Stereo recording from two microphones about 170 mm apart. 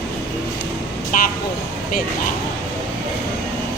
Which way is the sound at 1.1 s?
50° left (ahead or behind).